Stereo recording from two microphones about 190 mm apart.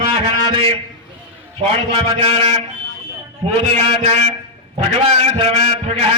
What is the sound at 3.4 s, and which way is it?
Speech, 35° right (ahead or behind).